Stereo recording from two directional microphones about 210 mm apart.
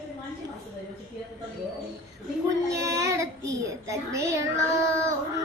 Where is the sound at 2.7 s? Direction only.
15° right (ahead or behind).